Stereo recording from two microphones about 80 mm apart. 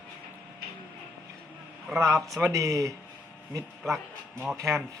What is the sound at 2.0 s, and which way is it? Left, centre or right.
Speech, right.